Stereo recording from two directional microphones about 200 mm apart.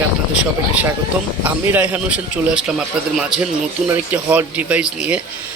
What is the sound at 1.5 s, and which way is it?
A man's voice, 10° right (ahead or behind).